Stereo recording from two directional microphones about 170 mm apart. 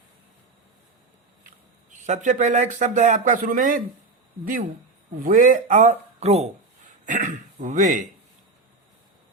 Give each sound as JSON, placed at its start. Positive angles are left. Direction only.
{"t": 1.9, "sound": "speech", "side_deg": -45}
{"t": 5.1, "sound": "speech", "side_deg": -50}